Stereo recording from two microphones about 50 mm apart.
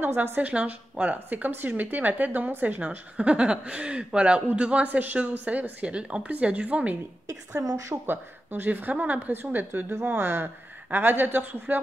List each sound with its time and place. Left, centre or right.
0.0 s speech: right
0.4 s a woman's voice: right
7.5 s speech: right
7.9 s a woman's voice: right